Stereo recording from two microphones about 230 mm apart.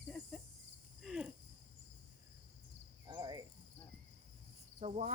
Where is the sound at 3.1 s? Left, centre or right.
Centre.